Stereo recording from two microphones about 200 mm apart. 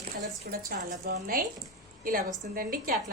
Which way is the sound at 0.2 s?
45° right (ahead or behind).